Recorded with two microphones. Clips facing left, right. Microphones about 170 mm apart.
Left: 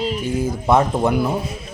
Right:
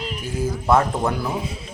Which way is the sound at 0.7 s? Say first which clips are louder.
Left 2 dB; 20° left (ahead or behind).